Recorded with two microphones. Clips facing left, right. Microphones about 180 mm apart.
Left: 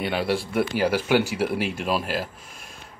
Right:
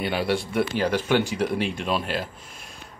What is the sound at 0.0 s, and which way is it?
Speech, centre (ahead or behind).